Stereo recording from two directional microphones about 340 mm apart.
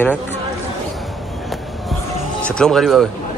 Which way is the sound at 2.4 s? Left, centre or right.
Centre.